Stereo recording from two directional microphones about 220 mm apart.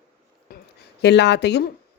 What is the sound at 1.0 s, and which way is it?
Speech, 50° left (ahead or behind).